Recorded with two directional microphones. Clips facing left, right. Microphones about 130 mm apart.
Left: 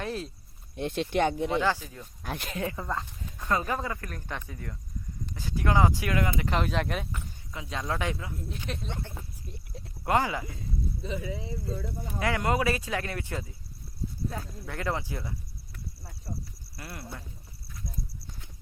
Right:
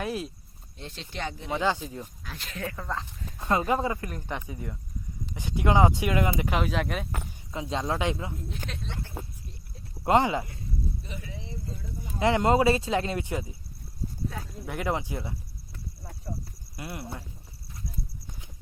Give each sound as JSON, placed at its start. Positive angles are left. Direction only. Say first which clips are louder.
{"t": 0.0, "sound": "speech", "louder": "right 2 dB", "side_deg": -10}
{"t": 0.8, "sound": "speech", "louder": "left 10 dB", "side_deg": 55}
{"t": 1.5, "sound": "speech", "louder": "even", "side_deg": -15}
{"t": 2.2, "sound": "speech", "louder": "left 7 dB", "side_deg": 55}
{"t": 2.6, "sound": "speech", "louder": "left 1 dB", "side_deg": 20}
{"t": 2.8, "sound": "speech", "louder": "left 1 dB", "side_deg": 5}
{"t": 3.3, "sound": "speech", "louder": "right 4 dB", "side_deg": -25}
{"t": 6.5, "sound": "speech", "louder": "right 1 dB", "side_deg": -5}
{"t": 7.5, "sound": "speech", "louder": "right 4 dB", "side_deg": -30}
{"t": 10.0, "sound": "speech", "louder": "right 4 dB", "side_deg": -20}
{"t": 12.2, "sound": "speech", "louder": "right 5 dB", "side_deg": -25}
{"t": 14.6, "sound": "speech", "louder": "right 3 dB", "side_deg": -15}
{"t": 16.7, "sound": "speech", "louder": "right 4 dB", "side_deg": -20}